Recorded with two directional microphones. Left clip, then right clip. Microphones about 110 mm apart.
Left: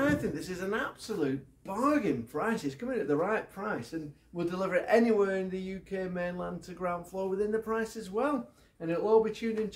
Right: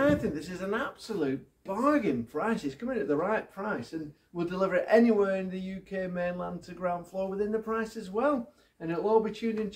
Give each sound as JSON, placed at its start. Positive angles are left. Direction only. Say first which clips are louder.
{"t": 0.0, "sound": "speech", "louder": "right 3 dB", "side_deg": 50}